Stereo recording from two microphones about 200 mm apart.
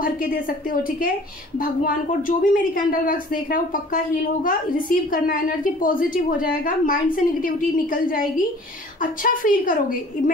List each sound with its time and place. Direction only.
0.0 s a woman's voice: 45° left (ahead or behind)